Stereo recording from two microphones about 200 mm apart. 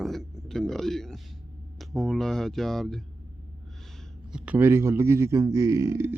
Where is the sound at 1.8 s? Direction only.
Centre (ahead or behind).